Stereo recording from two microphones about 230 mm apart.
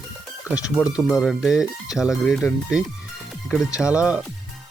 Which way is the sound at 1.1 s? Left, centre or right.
Centre.